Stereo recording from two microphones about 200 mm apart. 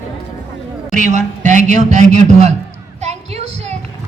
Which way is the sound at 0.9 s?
40° right (ahead or behind).